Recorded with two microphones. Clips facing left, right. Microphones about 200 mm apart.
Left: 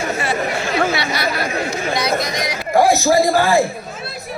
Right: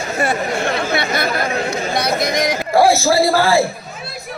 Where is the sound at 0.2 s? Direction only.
55° right (ahead or behind).